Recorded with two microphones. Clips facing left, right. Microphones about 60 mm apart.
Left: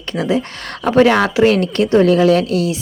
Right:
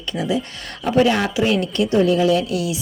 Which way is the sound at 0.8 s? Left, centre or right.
Left.